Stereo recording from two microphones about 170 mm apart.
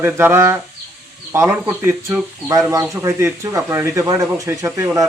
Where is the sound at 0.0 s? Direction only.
15° right (ahead or behind).